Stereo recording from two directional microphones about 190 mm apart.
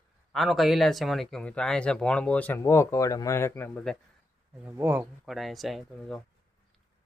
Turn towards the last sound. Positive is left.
turn(degrees=0)  # may be behind; listen again after turning